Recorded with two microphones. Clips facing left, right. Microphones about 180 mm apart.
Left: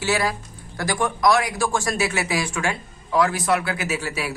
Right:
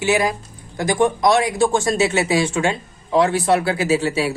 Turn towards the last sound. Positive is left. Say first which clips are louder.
# right 8 dB
turn(degrees=-25)  # may be behind; listen again after turning